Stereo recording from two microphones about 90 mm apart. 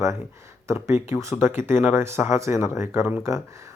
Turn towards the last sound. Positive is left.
turn(degrees=-35)  # may be behind; listen again after turning